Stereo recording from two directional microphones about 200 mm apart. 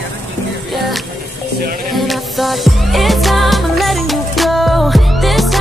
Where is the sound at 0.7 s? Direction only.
Centre (ahead or behind).